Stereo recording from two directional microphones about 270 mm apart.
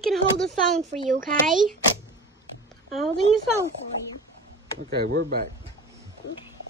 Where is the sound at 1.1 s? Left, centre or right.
Right.